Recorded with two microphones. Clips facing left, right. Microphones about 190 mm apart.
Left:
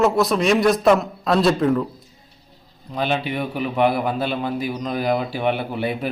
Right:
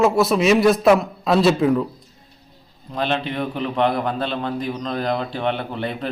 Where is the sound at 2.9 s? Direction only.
5° left (ahead or behind).